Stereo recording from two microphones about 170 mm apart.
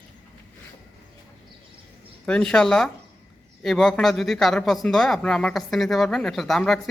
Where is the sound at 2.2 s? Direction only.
5° left (ahead or behind).